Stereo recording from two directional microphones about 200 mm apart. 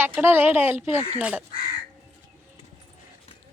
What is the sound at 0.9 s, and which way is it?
Speech, 25° left (ahead or behind).